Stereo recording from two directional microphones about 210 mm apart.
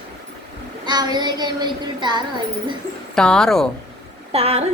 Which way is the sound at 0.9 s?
20° right (ahead or behind).